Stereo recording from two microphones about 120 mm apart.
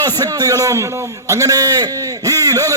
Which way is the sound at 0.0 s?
35° right (ahead or behind).